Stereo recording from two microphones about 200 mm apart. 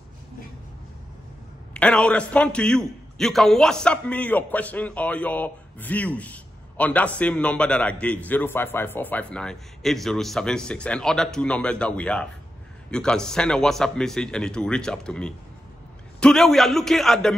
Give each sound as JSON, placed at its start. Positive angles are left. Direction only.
{"t": 1.7, "sound": "a man's voice", "side_deg": 5}